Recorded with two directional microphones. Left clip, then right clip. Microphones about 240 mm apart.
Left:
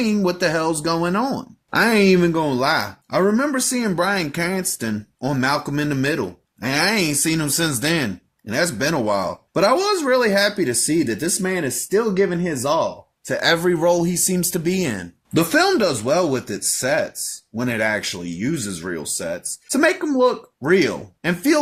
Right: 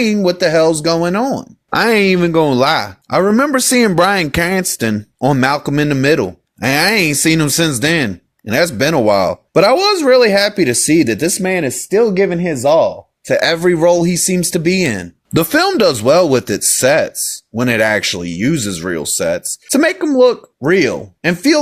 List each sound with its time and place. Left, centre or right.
0.0 s speech: right
1.7 s speech: right
15.3 s speech: right